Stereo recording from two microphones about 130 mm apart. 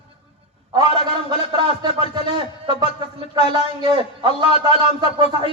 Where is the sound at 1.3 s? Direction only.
35° right (ahead or behind).